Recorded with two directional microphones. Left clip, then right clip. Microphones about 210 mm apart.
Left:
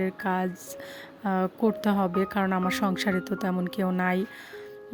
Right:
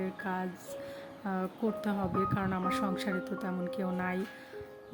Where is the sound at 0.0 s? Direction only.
40° left (ahead or behind).